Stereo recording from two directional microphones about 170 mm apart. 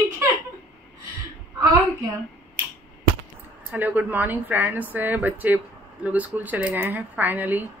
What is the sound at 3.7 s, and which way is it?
Speech, 10° right (ahead or behind).